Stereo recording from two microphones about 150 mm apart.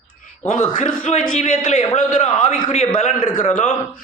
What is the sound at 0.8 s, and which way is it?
Speech, 50° left (ahead or behind).